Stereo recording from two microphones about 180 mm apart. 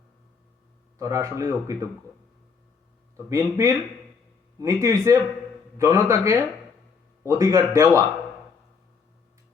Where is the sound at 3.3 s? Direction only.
15° right (ahead or behind).